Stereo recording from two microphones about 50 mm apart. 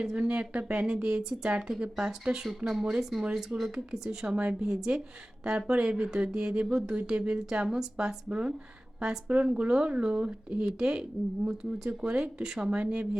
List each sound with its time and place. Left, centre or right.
0.2 s a woman's voice: right
9.5 s a woman's voice: centre